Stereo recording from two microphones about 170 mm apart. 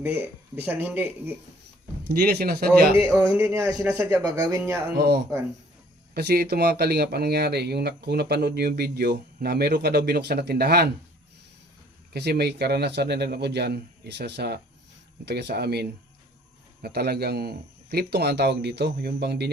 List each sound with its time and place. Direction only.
0.0 s speech: 10° right (ahead or behind)
2.0 s speech: 70° right (ahead or behind)
2.9 s speech: 20° right (ahead or behind)
4.9 s speech: 65° right (ahead or behind)
12.1 s speech: 70° right (ahead or behind)